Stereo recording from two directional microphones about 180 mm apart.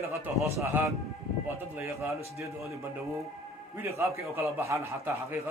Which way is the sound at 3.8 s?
15° right (ahead or behind).